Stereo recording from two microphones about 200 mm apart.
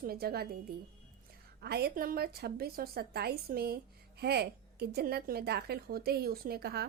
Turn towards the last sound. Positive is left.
turn(degrees=-50)  # may be behind; listen again after turning